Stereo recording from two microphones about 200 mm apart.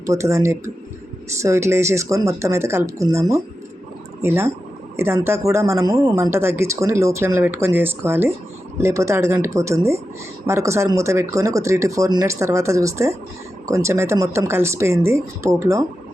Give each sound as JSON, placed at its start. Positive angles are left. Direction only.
{"t": 0.0, "sound": "speech", "side_deg": -15}